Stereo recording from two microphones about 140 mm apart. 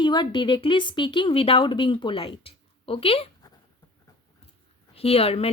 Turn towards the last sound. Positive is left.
turn(degrees=45)  # may be behind; listen again after turning